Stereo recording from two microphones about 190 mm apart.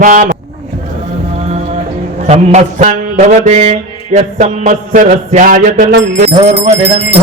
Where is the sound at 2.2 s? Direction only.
35° right (ahead or behind).